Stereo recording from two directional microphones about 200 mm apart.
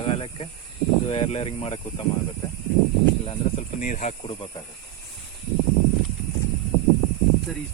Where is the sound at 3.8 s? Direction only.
40° left (ahead or behind).